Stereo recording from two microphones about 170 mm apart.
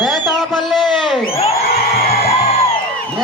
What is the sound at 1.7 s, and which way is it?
Music, 65° left (ahead or behind).